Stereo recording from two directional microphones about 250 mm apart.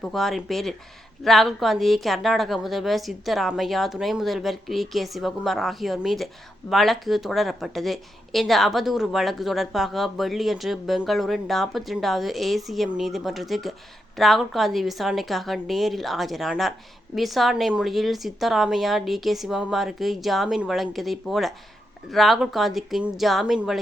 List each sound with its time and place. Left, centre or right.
0.0 s a woman's voice: centre